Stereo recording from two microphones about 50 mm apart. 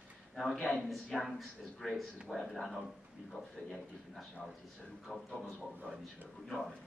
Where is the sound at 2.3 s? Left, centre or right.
Centre.